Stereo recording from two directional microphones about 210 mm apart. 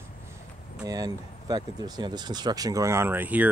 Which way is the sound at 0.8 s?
15° right (ahead or behind).